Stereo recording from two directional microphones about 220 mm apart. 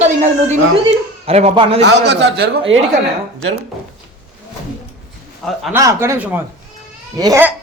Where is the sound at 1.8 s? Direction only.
50° right (ahead or behind).